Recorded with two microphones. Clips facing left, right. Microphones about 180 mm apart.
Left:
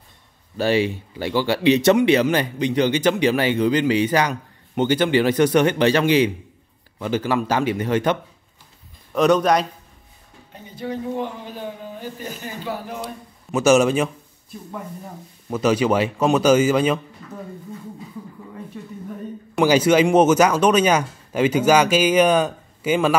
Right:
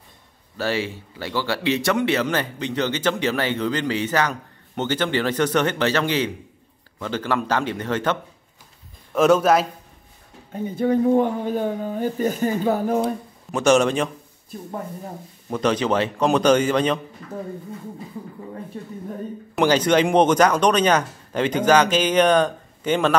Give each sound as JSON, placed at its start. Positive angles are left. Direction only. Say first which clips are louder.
{"t": 0.6, "sound": "speech", "louder": "left 5 dB", "side_deg": 15}
{"t": 9.1, "sound": "a man's voice", "louder": "right 1 dB", "side_deg": -5}
{"t": 10.5, "sound": "speech", "louder": "right 9 dB", "side_deg": -50}
{"t": 13.5, "sound": "speech", "louder": "left 2 dB", "side_deg": 5}
{"t": 15.5, "sound": "speech", "louder": "left 2 dB", "side_deg": 10}
{"t": 19.5, "sound": "speech", "louder": "left 2 dB", "side_deg": 5}